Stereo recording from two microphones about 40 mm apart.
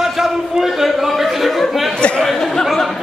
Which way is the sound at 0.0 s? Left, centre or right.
Centre.